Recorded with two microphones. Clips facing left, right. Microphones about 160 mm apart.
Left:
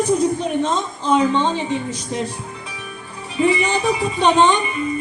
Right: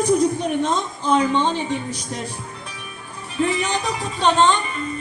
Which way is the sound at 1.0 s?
15° left (ahead or behind).